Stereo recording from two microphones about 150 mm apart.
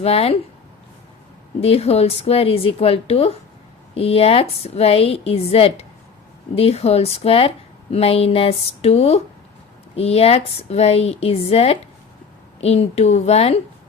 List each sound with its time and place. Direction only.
0.0 s a woman's voice: 40° left (ahead or behind)
1.6 s a woman's voice: 40° left (ahead or behind)